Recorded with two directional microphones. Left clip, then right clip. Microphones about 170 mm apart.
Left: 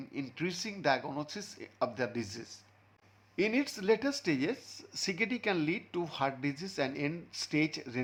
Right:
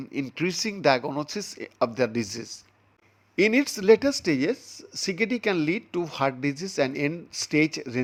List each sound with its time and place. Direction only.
0.3 s speech: 40° right (ahead or behind)